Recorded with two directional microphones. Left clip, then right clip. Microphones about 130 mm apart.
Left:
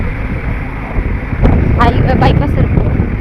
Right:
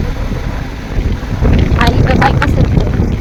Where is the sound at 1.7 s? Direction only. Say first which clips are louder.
Even; 10° left (ahead or behind).